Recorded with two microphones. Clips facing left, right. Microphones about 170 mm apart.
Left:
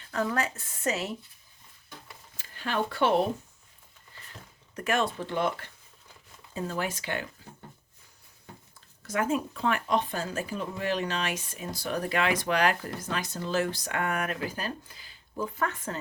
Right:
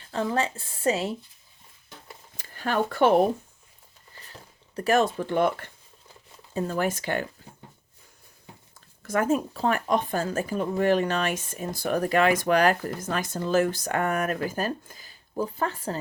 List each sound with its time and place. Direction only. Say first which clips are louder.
0.1 s a woman's voice: right 3 dB; 25° right (ahead or behind)
2.4 s speech: right 4 dB; 45° right (ahead or behind)
4.3 s speech: right 2 dB; 35° right (ahead or behind)
9.0 s speech: right 4 dB; 45° right (ahead or behind)